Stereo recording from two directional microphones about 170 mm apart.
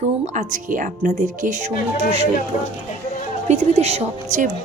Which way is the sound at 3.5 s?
40° right (ahead or behind).